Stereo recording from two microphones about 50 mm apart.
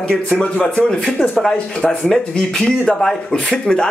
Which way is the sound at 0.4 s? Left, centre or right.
Centre.